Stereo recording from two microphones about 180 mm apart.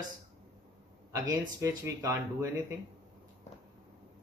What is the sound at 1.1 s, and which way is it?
Speech, 20° right (ahead or behind).